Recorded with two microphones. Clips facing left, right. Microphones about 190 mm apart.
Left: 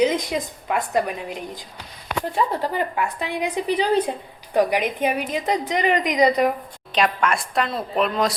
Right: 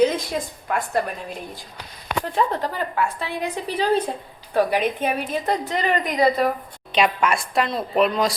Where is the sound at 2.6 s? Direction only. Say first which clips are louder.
Left 1 dB; 15° left (ahead or behind).